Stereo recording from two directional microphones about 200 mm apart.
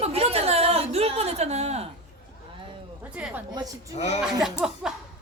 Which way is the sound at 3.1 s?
5° right (ahead or behind).